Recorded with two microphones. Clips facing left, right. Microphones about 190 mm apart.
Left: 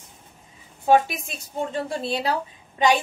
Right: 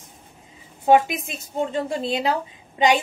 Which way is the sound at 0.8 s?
20° right (ahead or behind).